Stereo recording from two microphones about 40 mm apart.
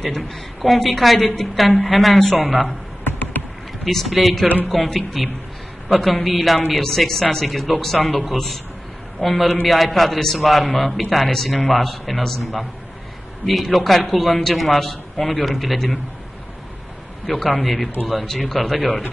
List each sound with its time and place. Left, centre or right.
0.6 s a man's voice: centre
3.0 s a sound: left
3.8 s a man's voice: centre
13.5 s a man's voice: centre
17.3 s a man's voice: centre